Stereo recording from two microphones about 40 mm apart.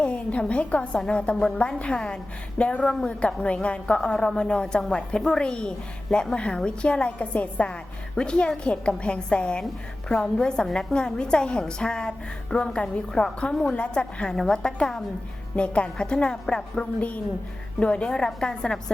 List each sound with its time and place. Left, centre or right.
0.0 s a woman's voice: left
2.8 s a woman's voice: centre
3.1 s a woman's voice: left
8.1 s a woman's voice: left
14.3 s a woman's voice: centre